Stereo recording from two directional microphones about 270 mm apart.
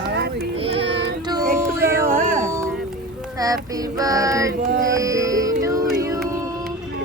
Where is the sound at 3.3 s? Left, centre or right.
Centre.